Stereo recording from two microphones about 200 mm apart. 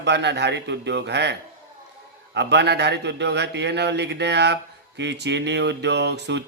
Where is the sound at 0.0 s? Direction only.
60° right (ahead or behind).